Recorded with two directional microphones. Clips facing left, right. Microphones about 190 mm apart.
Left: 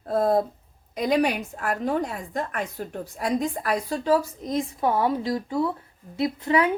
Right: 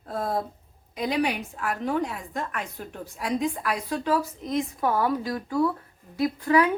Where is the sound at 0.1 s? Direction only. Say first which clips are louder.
Left 8 dB; 40° left (ahead or behind).